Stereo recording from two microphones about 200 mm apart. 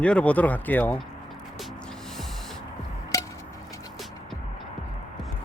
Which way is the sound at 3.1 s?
15° left (ahead or behind).